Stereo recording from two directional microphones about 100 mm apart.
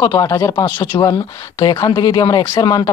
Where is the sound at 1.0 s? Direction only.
40° left (ahead or behind).